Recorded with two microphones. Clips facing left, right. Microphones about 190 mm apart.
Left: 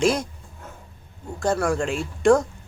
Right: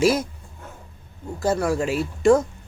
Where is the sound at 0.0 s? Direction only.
5° right (ahead or behind).